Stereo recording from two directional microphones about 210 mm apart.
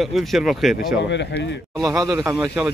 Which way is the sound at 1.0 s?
55° left (ahead or behind).